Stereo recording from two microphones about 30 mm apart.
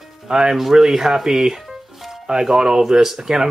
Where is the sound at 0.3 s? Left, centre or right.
Right.